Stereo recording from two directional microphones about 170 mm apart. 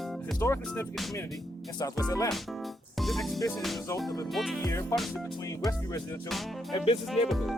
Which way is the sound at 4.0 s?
Centre (ahead or behind).